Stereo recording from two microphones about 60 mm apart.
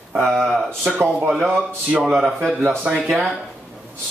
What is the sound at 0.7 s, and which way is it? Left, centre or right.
Speech, right.